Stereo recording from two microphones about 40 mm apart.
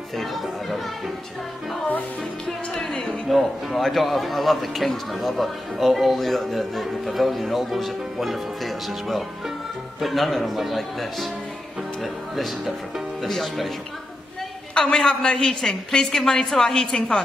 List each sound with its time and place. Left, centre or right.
0.2 s a man's voice: centre
2.4 s a woman's voice: centre
3.1 s a man's voice: centre
14.7 s a sound: left
15.0 s a woman's voice: centre